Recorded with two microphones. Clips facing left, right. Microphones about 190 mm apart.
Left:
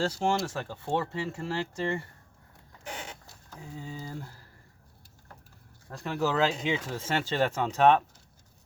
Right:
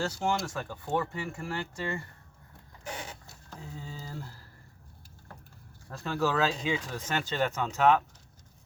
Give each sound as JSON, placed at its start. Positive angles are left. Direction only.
{"t": 0.0, "sound": "speech", "side_deg": 30}
{"t": 3.8, "sound": "speech", "side_deg": 15}
{"t": 5.9, "sound": "speech", "side_deg": 20}